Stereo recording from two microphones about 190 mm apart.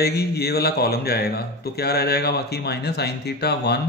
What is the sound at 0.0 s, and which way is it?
A man's voice, 55° left (ahead or behind).